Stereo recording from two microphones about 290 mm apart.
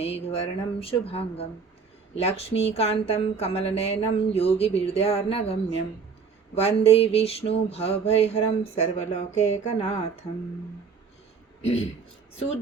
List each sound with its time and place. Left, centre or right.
0.0 s a woman's voice: left
11.6 s a man's voice: left